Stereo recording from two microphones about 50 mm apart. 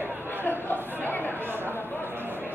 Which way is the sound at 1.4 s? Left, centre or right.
Right.